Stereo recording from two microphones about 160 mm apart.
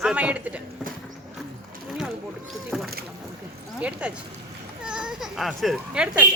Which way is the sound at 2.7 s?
Centre (ahead or behind).